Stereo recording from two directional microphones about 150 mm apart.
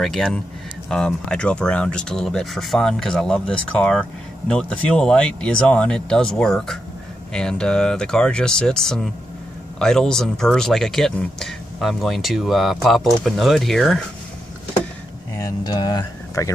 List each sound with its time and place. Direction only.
0.0 s speech: centre (ahead or behind)
15.3 s speech: 25° left (ahead or behind)